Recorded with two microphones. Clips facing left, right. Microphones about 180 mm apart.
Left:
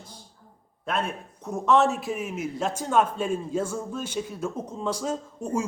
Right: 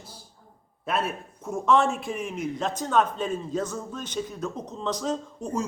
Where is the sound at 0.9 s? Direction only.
5° right (ahead or behind).